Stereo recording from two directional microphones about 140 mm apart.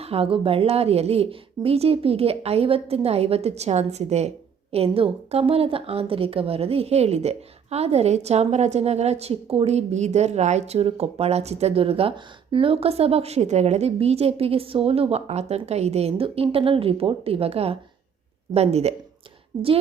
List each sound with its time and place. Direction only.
0.0 s a woman's voice: 45° right (ahead or behind)